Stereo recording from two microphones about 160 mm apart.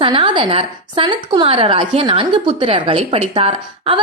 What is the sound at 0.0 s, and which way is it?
A woman's voice, 30° right (ahead or behind).